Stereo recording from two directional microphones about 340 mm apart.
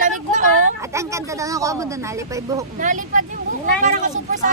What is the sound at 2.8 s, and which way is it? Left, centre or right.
Speech, right.